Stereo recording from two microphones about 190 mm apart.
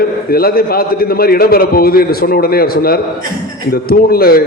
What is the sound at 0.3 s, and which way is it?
A man's voice, 50° left (ahead or behind).